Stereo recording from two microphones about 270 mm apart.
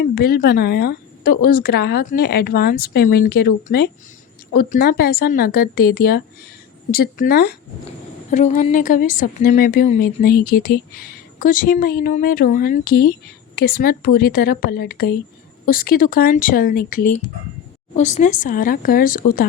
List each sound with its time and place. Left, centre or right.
0.0 s a woman's voice: left